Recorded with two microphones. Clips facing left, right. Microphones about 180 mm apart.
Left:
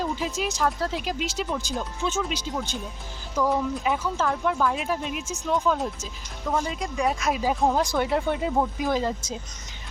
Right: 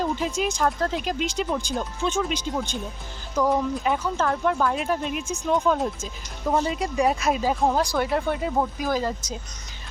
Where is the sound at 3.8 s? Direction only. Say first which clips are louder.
Right 1 dB; 5° left (ahead or behind).